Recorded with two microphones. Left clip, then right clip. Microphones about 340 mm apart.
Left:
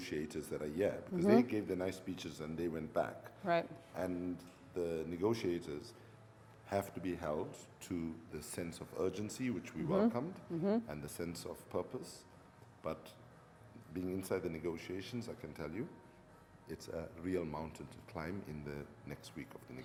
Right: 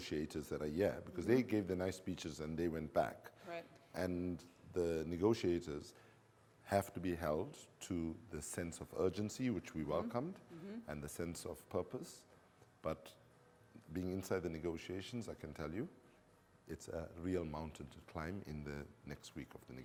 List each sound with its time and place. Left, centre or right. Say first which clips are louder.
0.0 s speech: left 1 dB; right
3.4 s speech: left 15 dB; left
3.9 s speech: left 1 dB; right